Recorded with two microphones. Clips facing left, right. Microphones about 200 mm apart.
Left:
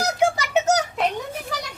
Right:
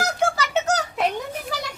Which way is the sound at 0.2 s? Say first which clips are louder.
Left 3 dB; 20° left (ahead or behind).